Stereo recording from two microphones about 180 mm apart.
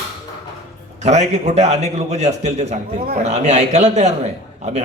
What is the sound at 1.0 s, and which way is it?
A man's voice, 40° right (ahead or behind).